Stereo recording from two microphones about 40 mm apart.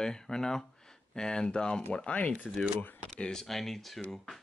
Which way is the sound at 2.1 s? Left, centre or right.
Left.